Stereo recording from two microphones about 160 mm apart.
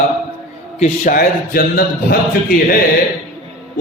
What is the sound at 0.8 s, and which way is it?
Mantra, 60° left (ahead or behind).